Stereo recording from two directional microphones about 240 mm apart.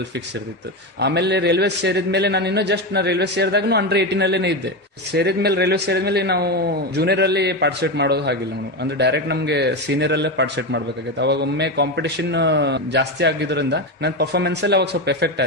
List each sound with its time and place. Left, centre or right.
0.9 s a man's voice: right